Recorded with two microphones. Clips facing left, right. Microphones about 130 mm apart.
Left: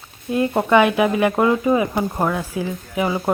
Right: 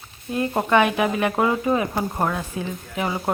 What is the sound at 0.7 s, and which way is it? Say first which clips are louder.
Speech: left 3 dB; 5° left (ahead or behind).